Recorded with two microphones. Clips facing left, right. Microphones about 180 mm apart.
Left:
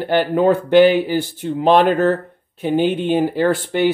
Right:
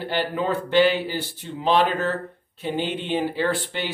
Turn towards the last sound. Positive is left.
turn(degrees=50)  # may be behind; listen again after turning